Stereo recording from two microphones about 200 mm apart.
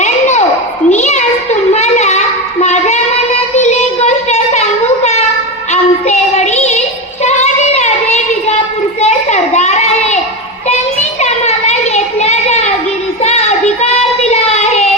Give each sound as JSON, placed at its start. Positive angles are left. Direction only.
{"t": 0.0, "sound": "a sound", "side_deg": 35}
{"t": 3.5, "sound": "child singing", "side_deg": 35}
{"t": 5.7, "sound": "child singing", "side_deg": 35}
{"t": 9.0, "sound": "a sound", "side_deg": 35}
{"t": 11.2, "sound": "children playing", "side_deg": 35}
{"t": 13.2, "sound": "child singing", "side_deg": 35}